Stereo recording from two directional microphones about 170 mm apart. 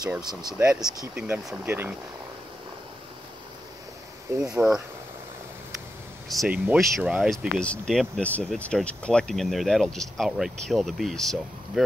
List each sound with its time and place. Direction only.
0.2 s speech: 25° right (ahead or behind)
0.6 s speech: 5° right (ahead or behind)
4.5 s speech: 10° right (ahead or behind)
6.2 s speech: centre (ahead or behind)